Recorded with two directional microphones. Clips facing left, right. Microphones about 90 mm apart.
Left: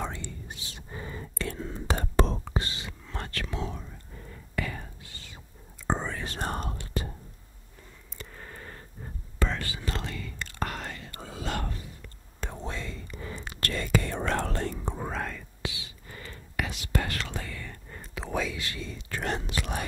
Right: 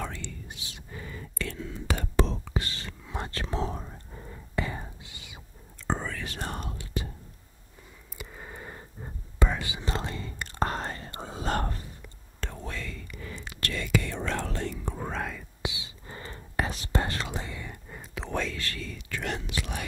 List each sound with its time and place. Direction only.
0.6 s whispering: 35° left (ahead or behind)
2.7 s whispering: 10° left (ahead or behind)
3.3 s whispering: 30° right (ahead or behind)
4.2 s whispering: 25° right (ahead or behind)
5.9 s whispering: 25° left (ahead or behind); by 7.1 s 45° left (ahead or behind)
8.2 s whispering: 10° right (ahead or behind); by 11.5 s 30° right (ahead or behind)
12.4 s whispering: 20° left (ahead or behind)
13.4 s whispering: 40° left (ahead or behind)
15.0 s whispering: centre (ahead or behind)
15.6 s whispering: 20° right (ahead or behind)
18.2 s whispering: 5° left (ahead or behind); by 19.0 s 20° left (ahead or behind)
19.0 s whispering: 35° left (ahead or behind)